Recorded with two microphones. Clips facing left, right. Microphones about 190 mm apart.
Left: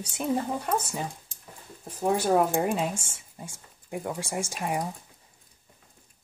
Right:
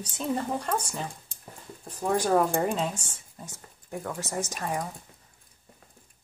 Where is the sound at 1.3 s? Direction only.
60° right (ahead or behind).